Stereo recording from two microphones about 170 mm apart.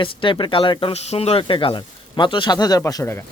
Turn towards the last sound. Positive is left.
turn(degrees=15)  # may be behind; listen again after turning